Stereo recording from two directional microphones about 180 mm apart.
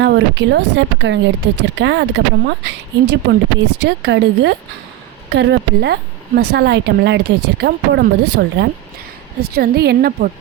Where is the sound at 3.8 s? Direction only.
75° right (ahead or behind).